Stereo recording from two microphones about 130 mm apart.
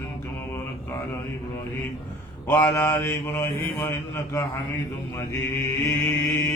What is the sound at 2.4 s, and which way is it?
Mantra, 20° left (ahead or behind).